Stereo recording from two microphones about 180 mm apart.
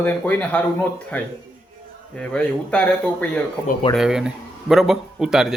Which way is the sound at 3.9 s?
5° right (ahead or behind).